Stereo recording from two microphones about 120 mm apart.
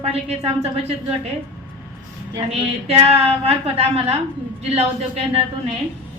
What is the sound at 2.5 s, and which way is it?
A woman's voice, 55° right (ahead or behind).